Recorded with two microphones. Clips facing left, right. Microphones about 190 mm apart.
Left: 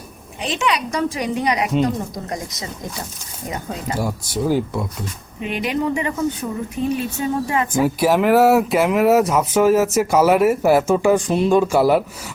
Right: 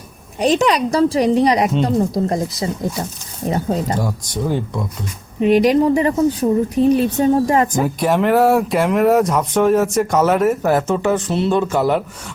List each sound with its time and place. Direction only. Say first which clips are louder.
0.3 s speech: right 7 dB; 40° right (ahead or behind)
3.9 s speech: right 1 dB; 5° left (ahead or behind)
5.4 s speech: right 10 dB; 40° right (ahead or behind)
7.7 s speech: left 1 dB; 5° left (ahead or behind)